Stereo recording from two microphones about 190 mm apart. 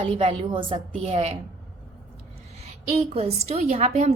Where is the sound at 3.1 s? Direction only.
35° right (ahead or behind).